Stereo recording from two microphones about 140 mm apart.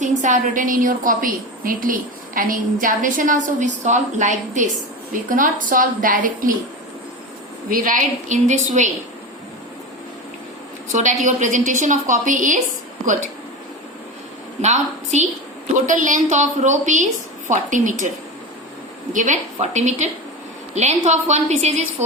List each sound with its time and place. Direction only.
0.0 s a woman's voice: 60° right (ahead or behind); by 6.6 s 75° right (ahead or behind)
7.7 s a woman's voice: 70° right (ahead or behind)
10.9 s a woman's voice: 60° right (ahead or behind)
14.6 s a woman's voice: 55° right (ahead or behind)
19.1 s a woman's voice: 60° right (ahead or behind)